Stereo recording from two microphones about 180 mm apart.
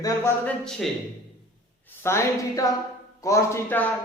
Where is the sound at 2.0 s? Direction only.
15° left (ahead or behind).